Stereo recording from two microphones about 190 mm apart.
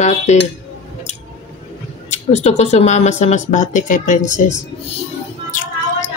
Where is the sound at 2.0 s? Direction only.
35° left (ahead or behind).